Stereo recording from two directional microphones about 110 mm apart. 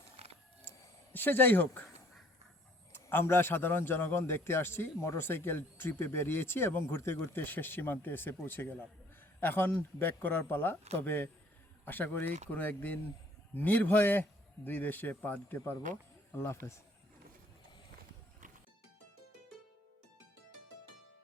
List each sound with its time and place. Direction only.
0.2 s printer: 65° right (ahead or behind)
1.1 s a man's voice: 20° left (ahead or behind)
2.9 s a man's voice: 20° left (ahead or behind)